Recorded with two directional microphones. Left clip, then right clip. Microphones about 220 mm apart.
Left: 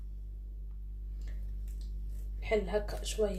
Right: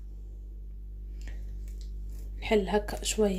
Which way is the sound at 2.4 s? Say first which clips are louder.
Right 5 dB; 40° right (ahead or behind).